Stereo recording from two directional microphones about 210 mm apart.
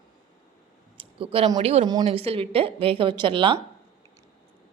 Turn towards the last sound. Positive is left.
turn(degrees=-25)  # may be behind; listen again after turning